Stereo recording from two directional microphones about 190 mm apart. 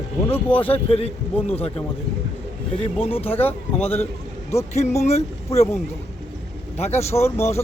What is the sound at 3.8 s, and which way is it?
A man's voice, 35° left (ahead or behind).